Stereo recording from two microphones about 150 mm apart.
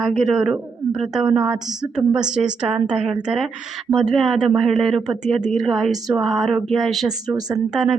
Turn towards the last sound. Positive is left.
turn(degrees=-5)  # may be behind; listen again after turning